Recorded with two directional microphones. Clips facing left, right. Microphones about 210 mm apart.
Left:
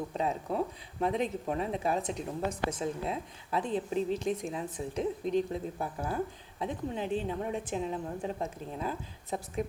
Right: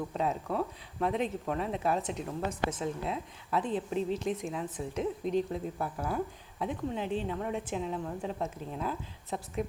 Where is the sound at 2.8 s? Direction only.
35° left (ahead or behind).